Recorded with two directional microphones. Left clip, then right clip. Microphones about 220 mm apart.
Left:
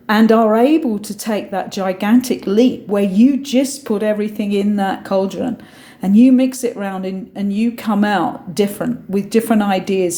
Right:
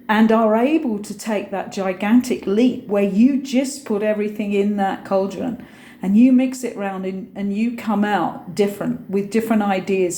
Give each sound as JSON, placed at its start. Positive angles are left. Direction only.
{"t": 0.1, "sound": "speech", "side_deg": 45}